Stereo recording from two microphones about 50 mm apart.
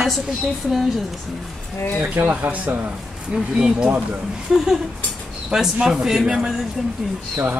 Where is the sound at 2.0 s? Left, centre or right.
Right.